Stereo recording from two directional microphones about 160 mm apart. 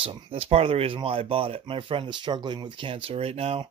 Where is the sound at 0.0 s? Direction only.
35° right (ahead or behind).